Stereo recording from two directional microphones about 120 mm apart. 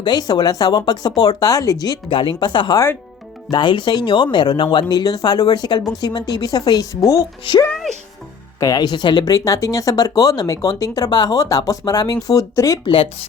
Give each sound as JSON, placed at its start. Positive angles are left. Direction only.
{"t": 0.0, "sound": "speech", "side_deg": 35}
{"t": 2.7, "sound": "speech", "side_deg": 20}
{"t": 3.5, "sound": "speech", "side_deg": 40}
{"t": 7.5, "sound": "speech", "side_deg": 45}
{"t": 8.5, "sound": "speech", "side_deg": 30}
{"t": 12.8, "sound": "speech", "side_deg": 45}